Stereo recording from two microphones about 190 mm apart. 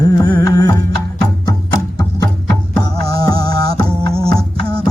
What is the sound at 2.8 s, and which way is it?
Music, 20° left (ahead or behind).